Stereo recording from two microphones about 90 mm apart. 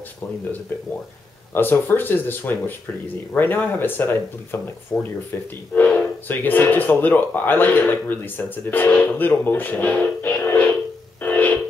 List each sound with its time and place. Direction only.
1.5 s speech: 25° left (ahead or behind)
10.4 s music: 20° left (ahead or behind)
11.2 s a sound: 15° left (ahead or behind)